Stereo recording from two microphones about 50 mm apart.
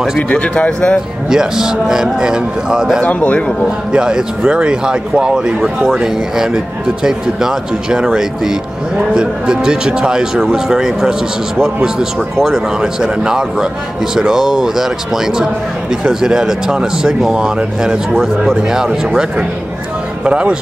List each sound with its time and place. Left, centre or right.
0.3 s speech: left
1.3 s speech: centre
3.0 s speech: left
3.9 s speech: centre
9.1 s speech: centre
16.1 s speech: centre
20.2 s speech: right